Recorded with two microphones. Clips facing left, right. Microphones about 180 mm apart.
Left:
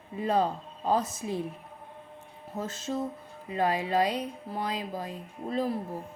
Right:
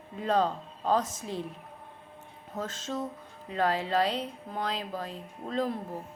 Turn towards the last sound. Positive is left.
turn(degrees=10)  # may be behind; listen again after turning